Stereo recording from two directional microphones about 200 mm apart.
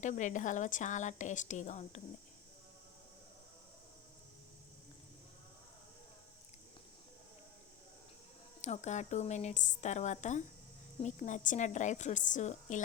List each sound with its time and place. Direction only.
0.0 s a woman's voice: 40° left (ahead or behind)
8.6 s a woman's voice: 35° left (ahead or behind)